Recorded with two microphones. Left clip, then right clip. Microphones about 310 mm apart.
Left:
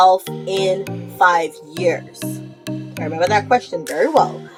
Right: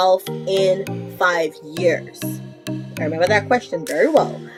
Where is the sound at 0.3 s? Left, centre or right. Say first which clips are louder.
Right 1 dB; centre.